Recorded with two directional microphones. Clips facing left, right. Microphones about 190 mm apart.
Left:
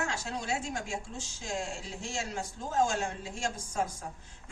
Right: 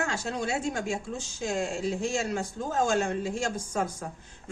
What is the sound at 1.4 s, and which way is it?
A woman's voice, 65° right (ahead or behind).